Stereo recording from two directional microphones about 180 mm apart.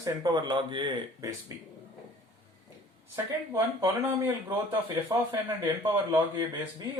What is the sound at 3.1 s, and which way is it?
Speech, 15° right (ahead or behind).